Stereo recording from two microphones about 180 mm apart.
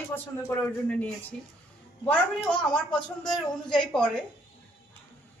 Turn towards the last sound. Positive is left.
turn(degrees=5)  # may be behind; listen again after turning